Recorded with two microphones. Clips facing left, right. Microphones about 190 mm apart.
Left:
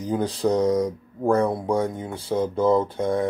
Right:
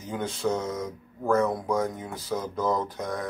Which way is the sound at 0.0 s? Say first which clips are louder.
Left 6 dB; 35° left (ahead or behind).